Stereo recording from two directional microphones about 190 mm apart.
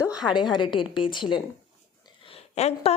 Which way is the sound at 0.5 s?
25° left (ahead or behind).